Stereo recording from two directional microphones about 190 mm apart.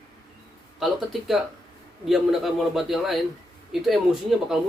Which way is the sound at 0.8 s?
Centre (ahead or behind).